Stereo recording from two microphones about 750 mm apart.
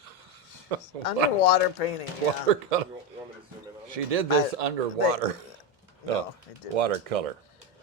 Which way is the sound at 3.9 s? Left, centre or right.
Right.